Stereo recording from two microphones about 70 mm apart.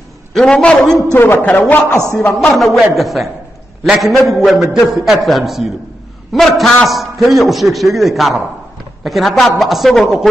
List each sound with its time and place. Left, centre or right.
0.3 s a man's voice: centre
1.4 s a man's voice: left
2.1 s a man's voice: centre
2.5 s a man's voice: centre